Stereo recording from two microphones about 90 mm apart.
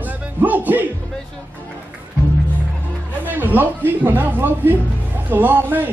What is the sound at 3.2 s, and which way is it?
Speech, 20° right (ahead or behind).